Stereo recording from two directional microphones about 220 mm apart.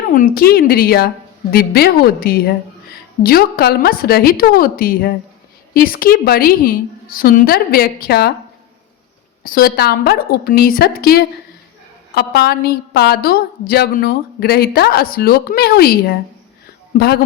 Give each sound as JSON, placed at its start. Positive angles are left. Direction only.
{"t": 0.1, "sound": "a woman's voice", "side_deg": 40}
{"t": 9.4, "sound": "a woman's voice", "side_deg": 40}